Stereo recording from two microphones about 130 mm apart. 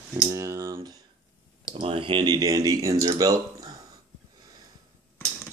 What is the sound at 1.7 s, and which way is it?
Speech, 45° right (ahead or behind).